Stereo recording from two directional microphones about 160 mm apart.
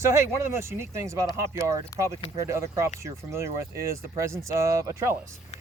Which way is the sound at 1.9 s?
20° left (ahead or behind).